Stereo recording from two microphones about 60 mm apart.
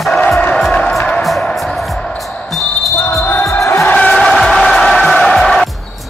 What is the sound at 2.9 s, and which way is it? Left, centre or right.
Basketball bounce, left.